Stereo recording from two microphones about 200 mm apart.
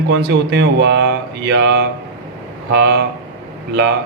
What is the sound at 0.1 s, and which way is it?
Speech, 55° right (ahead or behind).